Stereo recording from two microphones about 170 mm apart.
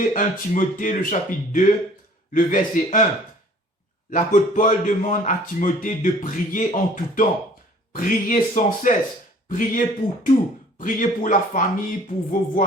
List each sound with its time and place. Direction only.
0.1 s a man's voice: 50° left (ahead or behind)
4.1 s a man's voice: 50° left (ahead or behind)